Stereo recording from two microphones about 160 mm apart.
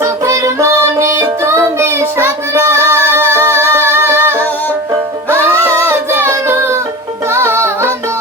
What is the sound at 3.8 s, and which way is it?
Music, 15° right (ahead or behind).